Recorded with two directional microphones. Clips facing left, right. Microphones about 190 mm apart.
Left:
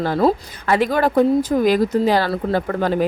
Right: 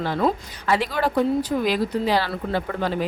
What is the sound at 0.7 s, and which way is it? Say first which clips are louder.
Speech: left 5 dB; 50° left (ahead or behind).